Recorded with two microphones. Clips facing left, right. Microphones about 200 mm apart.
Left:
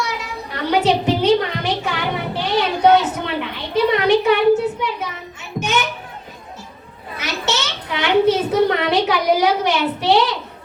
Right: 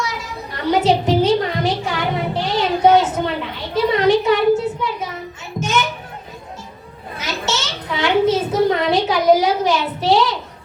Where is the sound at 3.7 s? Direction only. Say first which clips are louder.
Even; 65° left (ahead or behind).